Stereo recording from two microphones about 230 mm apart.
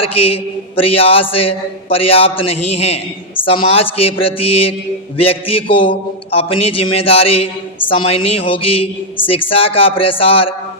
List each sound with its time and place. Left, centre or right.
0.1 s a man's voice: left